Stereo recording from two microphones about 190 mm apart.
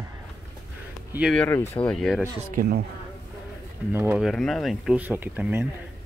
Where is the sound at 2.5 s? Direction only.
55° right (ahead or behind).